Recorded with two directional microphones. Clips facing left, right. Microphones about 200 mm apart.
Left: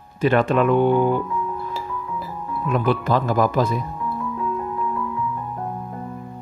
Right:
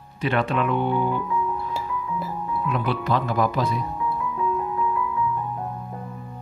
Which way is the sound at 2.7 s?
50° left (ahead or behind).